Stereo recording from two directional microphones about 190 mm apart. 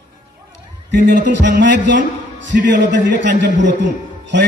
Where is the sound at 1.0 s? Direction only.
45° right (ahead or behind).